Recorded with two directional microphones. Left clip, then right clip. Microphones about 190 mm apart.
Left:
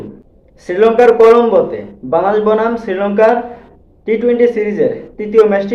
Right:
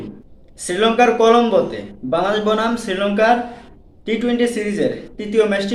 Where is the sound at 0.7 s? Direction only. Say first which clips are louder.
Left 6 dB; 20° right (ahead or behind).